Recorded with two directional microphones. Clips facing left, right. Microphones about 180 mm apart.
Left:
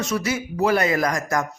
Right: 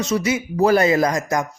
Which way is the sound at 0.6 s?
35° right (ahead or behind).